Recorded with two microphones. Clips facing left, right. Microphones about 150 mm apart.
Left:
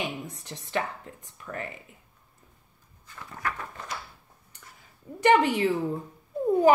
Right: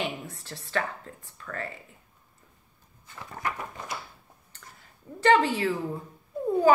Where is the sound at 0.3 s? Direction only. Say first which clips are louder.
Even; 20° left (ahead or behind).